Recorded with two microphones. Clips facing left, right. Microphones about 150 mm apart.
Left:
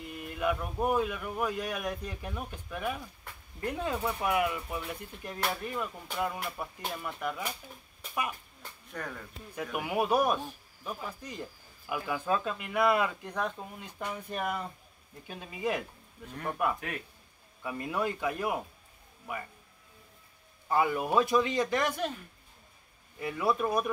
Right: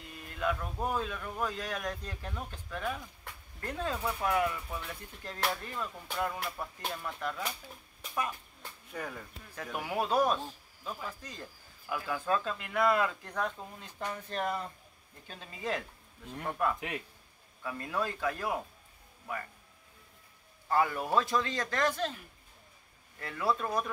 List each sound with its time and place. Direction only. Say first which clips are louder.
0.0 s speech: left 3 dB; 15° left (ahead or behind)
8.9 s speech: even; 5° right (ahead or behind)
9.6 s speech: left 3 dB; 15° left (ahead or behind)
20.6 s speech: left 2 dB; 15° left (ahead or behind)
23.1 s speech: left 3 dB; 15° left (ahead or behind)